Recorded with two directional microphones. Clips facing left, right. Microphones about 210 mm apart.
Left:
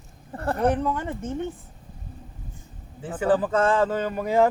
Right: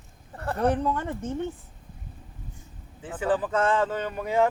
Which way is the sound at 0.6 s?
15° left (ahead or behind).